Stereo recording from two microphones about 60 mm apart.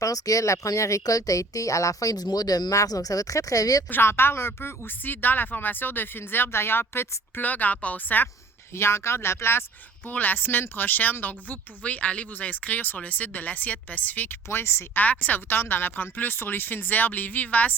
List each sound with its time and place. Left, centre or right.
0.0 s speech: left
3.8 s speech: left
7.3 s speech: left
8.7 s speech: left
10.1 s speech: left
14.6 s speech: left
14.9 s speech: left